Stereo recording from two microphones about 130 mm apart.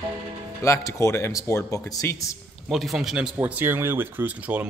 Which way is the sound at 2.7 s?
Centre (ahead or behind).